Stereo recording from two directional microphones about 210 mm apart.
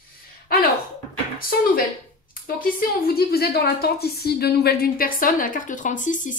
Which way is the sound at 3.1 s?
50° left (ahead or behind).